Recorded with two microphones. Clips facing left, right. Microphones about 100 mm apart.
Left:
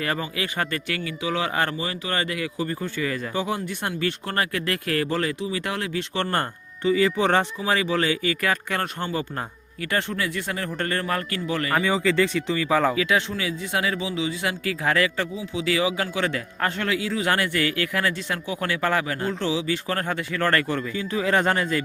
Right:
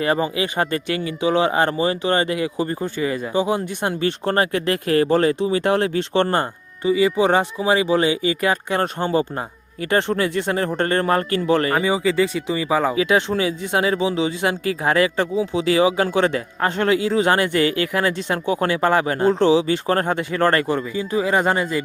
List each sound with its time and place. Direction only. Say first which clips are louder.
0.0 s speech: right 7 dB; 20° right (ahead or behind)
6.3 s speech: right 4 dB; 15° right (ahead or behind); by 11.7 s 35° right (ahead or behind)
11.7 s speech: right 3 dB; 15° right (ahead or behind)
13.0 s speech: right 5 dB; 25° right (ahead or behind); by 21.8 s 10° right (ahead or behind)